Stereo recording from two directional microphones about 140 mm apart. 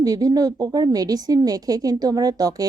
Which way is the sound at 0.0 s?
25° right (ahead or behind).